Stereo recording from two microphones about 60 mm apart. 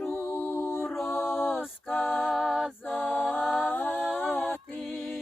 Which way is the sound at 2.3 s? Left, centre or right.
Centre.